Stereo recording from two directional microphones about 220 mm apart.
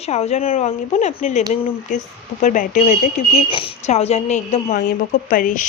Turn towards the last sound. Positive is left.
turn(degrees=35)  # may be behind; listen again after turning